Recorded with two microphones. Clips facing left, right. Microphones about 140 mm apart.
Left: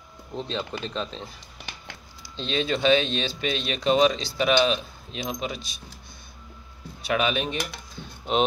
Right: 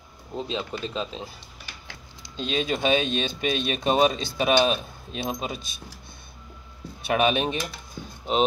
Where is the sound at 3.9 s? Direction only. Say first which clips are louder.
Left 1 dB; 45° right (ahead or behind).